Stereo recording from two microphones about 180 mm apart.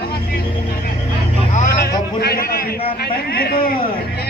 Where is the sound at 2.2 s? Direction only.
60° left (ahead or behind).